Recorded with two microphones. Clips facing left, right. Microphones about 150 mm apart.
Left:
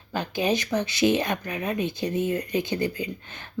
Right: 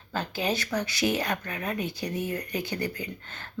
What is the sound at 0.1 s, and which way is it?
Speech, 15° left (ahead or behind).